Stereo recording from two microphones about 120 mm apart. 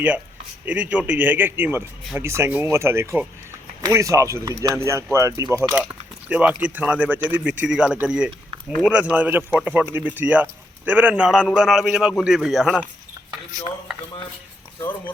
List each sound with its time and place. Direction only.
0.6 s speech: 10° right (ahead or behind); by 5.7 s 30° right (ahead or behind)
6.2 s speech: 10° right (ahead or behind)
14.8 s speech: 20° left (ahead or behind)